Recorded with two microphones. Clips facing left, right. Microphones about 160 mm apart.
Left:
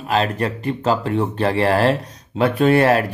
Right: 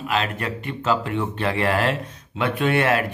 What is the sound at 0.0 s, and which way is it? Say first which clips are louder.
Speech: left 5 dB; 35° left (ahead or behind).